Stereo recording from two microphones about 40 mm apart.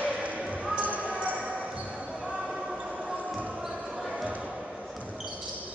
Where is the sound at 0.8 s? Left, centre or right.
Right.